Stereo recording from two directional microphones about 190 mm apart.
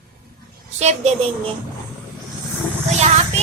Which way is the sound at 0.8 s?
35° right (ahead or behind).